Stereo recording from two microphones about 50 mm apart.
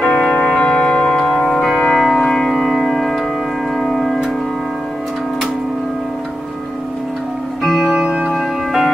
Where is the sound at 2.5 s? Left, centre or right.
Centre.